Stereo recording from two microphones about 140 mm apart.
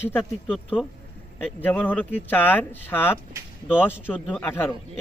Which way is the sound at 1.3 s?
10° left (ahead or behind).